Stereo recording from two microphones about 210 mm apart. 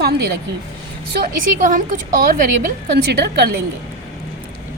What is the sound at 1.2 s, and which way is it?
A woman's voice, 40° right (ahead or behind).